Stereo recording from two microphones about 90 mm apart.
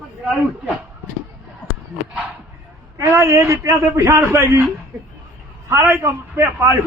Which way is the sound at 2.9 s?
30° right (ahead or behind).